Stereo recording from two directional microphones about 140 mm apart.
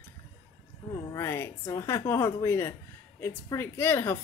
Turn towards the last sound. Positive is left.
turn(degrees=15)  # may be behind; listen again after turning